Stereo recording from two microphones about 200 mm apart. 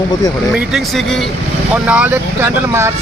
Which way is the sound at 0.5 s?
Centre (ahead or behind).